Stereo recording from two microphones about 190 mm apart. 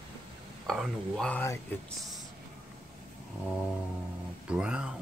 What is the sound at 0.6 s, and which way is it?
Speech, centre (ahead or behind).